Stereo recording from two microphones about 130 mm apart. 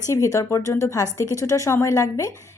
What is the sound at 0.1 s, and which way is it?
A woman's voice, 25° left (ahead or behind).